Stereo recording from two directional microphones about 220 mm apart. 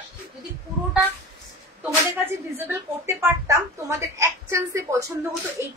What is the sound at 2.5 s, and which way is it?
Speech, 10° right (ahead or behind).